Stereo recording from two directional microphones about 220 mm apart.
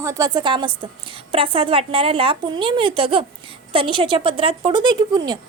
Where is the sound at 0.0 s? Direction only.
15° right (ahead or behind).